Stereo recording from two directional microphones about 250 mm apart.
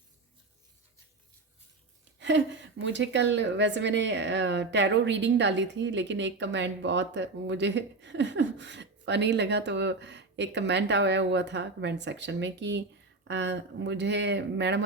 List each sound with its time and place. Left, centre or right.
2.1 s a woman's voice: right